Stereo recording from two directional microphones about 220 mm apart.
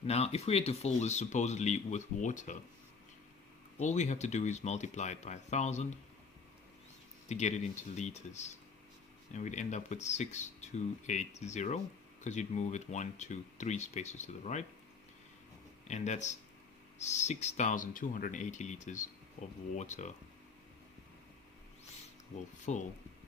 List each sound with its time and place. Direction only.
0.1 s speech: 30° left (ahead or behind)
3.8 s speech: 30° left (ahead or behind)
7.3 s speech: 30° left (ahead or behind)
15.9 s speech: 30° left (ahead or behind)
22.6 s speech: 35° left (ahead or behind)